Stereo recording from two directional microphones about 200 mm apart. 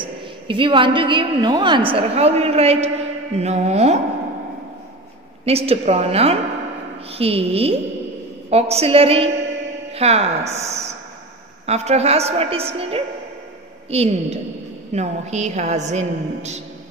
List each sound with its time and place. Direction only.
0.0 s a woman's voice: 25° right (ahead or behind)
5.4 s a woman's voice: 30° right (ahead or behind)